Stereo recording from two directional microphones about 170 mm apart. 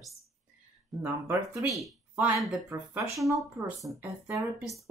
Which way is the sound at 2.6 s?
15° right (ahead or behind).